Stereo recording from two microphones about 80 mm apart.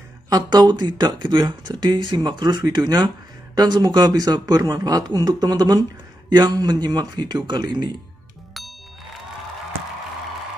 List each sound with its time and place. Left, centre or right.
0.3 s speech: right